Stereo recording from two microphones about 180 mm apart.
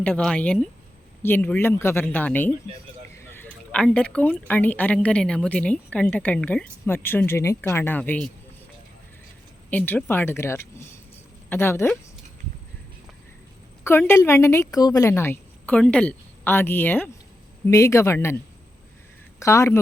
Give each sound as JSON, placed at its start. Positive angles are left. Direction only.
{"t": 0.0, "sound": "speech", "side_deg": 5}
{"t": 9.6, "sound": "speech", "side_deg": 10}
{"t": 13.8, "sound": "speech", "side_deg": 15}
{"t": 19.4, "sound": "speech", "side_deg": 15}